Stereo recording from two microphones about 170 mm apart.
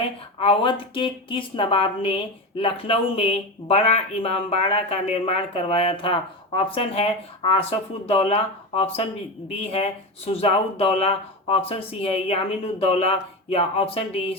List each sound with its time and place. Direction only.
0.0 s speech: 30° left (ahead or behind)